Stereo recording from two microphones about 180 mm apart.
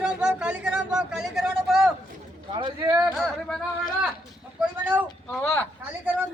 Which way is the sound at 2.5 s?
25° right (ahead or behind).